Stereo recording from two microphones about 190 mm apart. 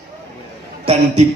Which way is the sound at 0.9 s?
30° right (ahead or behind).